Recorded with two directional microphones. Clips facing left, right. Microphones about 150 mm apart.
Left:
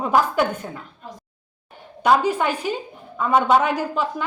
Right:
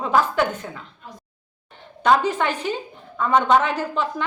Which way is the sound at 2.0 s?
10° left (ahead or behind).